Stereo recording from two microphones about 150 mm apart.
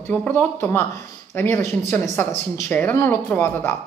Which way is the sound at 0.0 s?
10° left (ahead or behind).